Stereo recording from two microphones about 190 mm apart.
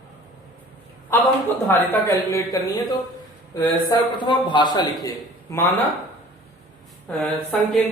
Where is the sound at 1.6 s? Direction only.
15° left (ahead or behind).